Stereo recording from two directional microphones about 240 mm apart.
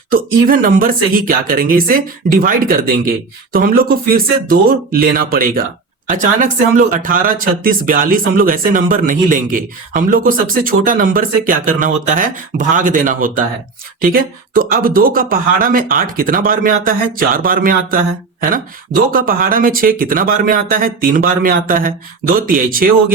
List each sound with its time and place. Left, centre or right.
0.1 s speech: right